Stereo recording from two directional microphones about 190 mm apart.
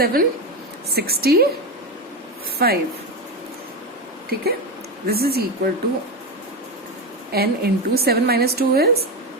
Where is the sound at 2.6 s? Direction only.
55° right (ahead or behind).